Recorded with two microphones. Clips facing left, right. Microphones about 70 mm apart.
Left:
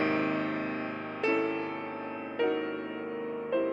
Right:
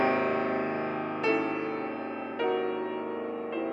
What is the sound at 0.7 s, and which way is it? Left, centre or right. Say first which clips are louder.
Music: right 4 dB; centre.